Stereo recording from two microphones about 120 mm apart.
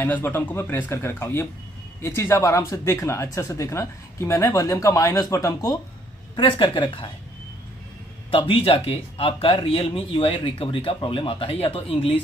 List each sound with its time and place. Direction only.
0.0 s speech: 20° left (ahead or behind)
6.3 s a man's voice: 40° left (ahead or behind)
8.3 s a man's voice: 50° left (ahead or behind)